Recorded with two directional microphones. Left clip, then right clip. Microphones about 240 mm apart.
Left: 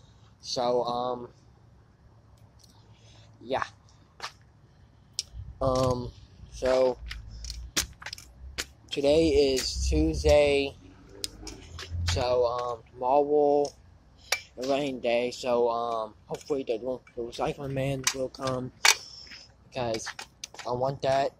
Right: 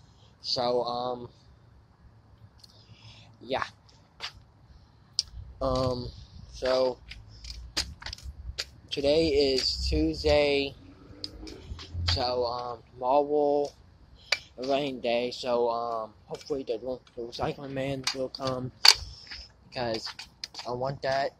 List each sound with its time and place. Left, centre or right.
0.4 s speech: centre
2.6 s a sound: centre
5.1 s typing: centre
8.8 s speech: centre
11.2 s a sound: left
12.0 s speech: centre
18.8 s single-lens reflex camera: centre
19.9 s speech: centre